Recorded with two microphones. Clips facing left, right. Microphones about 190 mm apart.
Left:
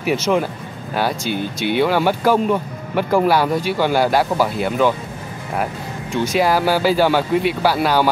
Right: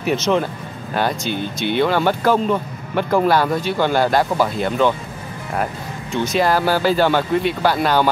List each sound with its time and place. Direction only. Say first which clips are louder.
0.0 s speech: even; 10° left (ahead or behind)
6.1 s speech: left 1 dB; 10° left (ahead or behind)